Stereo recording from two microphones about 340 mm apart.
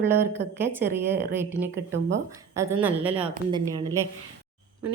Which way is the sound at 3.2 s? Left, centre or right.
Centre.